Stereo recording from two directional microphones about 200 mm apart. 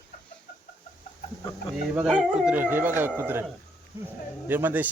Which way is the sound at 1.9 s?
5° right (ahead or behind).